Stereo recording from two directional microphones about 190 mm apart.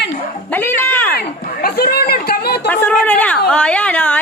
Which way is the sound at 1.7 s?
55° left (ahead or behind).